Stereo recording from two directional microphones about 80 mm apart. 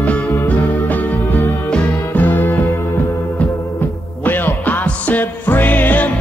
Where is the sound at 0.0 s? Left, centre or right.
Centre.